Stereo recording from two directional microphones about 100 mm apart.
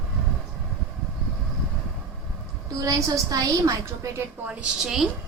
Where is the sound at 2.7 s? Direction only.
40° right (ahead or behind).